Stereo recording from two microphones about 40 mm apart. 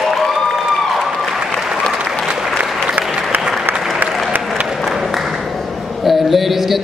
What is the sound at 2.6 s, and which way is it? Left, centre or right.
Applause, right.